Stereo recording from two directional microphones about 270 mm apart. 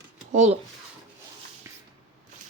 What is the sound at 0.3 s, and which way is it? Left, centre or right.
Speech, right.